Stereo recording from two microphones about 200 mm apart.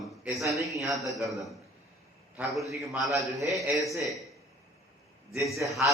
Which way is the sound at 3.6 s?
15° right (ahead or behind).